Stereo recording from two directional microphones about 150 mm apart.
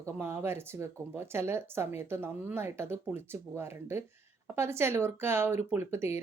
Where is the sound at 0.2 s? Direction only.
15° right (ahead or behind).